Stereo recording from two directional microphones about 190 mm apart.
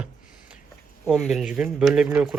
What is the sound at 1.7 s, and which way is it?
Speech, 5° right (ahead or behind).